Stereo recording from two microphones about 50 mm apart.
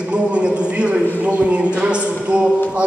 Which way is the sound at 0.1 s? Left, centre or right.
Right.